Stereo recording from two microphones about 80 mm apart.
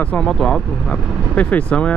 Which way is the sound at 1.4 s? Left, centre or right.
Centre.